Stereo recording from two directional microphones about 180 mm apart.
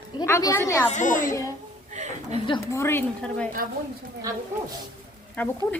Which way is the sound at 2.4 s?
25° left (ahead or behind).